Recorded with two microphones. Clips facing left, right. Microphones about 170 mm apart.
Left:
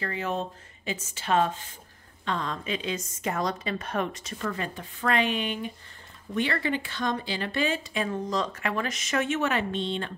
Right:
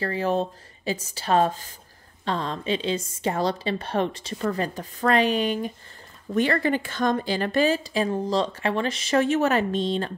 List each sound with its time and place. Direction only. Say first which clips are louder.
0.0 s speech: right 6 dB; 35° right (ahead or behind)